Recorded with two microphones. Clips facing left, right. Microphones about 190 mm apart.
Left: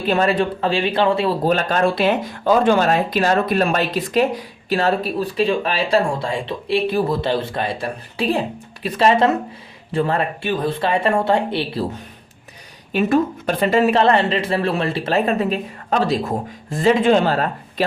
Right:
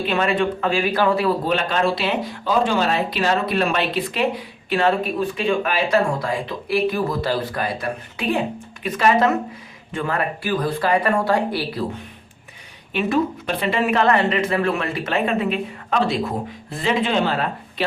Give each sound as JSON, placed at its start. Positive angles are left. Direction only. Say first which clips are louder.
{"t": 0.1, "sound": "speech", "louder": "left 4 dB", "side_deg": 40}
{"t": 1.5, "sound": "speech", "louder": "left 3 dB", "side_deg": 45}
{"t": 12.9, "sound": "speech", "louder": "left 3 dB", "side_deg": 45}
{"t": 13.9, "sound": "speech", "louder": "left 2 dB", "side_deg": 30}